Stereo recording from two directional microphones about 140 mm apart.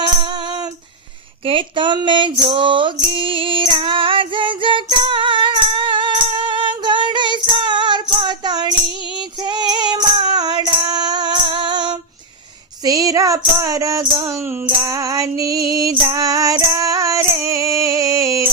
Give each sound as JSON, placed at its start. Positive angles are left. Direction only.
{"t": 0.0, "sound": "music", "side_deg": -35}
{"t": 1.5, "sound": "female singing", "side_deg": -35}
{"t": 9.4, "sound": "music", "side_deg": -30}